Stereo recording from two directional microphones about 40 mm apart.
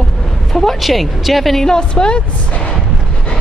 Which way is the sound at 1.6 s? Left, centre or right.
Centre.